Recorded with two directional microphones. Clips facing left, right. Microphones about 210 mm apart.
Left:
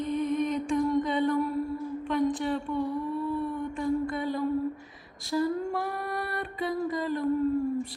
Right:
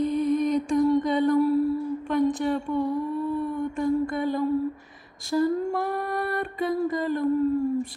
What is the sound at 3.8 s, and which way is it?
Music, 50° right (ahead or behind).